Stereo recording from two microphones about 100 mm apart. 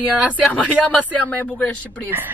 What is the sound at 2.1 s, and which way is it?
Speech, 20° right (ahead or behind).